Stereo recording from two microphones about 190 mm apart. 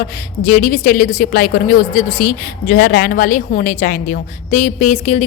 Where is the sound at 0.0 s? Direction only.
45° left (ahead or behind).